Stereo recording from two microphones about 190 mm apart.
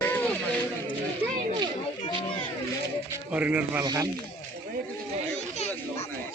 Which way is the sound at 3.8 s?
20° right (ahead or behind).